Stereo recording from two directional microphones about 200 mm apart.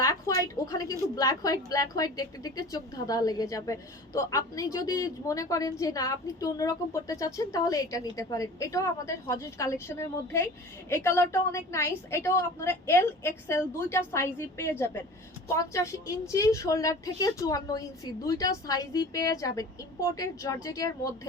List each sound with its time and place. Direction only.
0.0 s a woman's voice: 15° left (ahead or behind)